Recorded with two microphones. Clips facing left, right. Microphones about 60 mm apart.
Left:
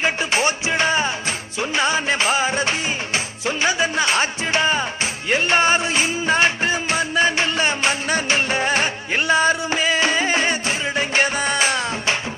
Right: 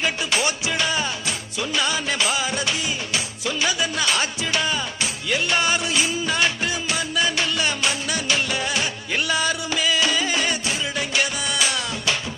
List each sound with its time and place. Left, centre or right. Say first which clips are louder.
0.0 s music: left 3 dB; left